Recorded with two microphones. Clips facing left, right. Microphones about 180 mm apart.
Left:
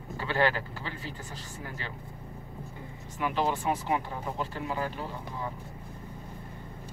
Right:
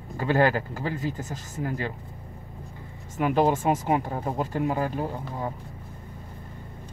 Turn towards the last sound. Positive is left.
turn(degrees=-45)  # may be behind; listen again after turning